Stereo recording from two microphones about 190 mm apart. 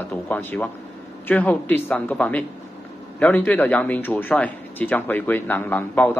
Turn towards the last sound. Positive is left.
turn(degrees=10)  # may be behind; listen again after turning